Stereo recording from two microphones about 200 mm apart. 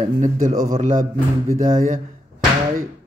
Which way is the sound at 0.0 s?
40° right (ahead or behind).